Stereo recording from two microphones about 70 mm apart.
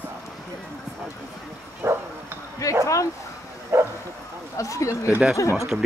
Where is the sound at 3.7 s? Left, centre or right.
Right.